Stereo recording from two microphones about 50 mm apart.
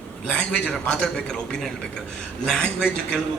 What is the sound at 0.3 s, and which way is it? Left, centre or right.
A man's voice, centre.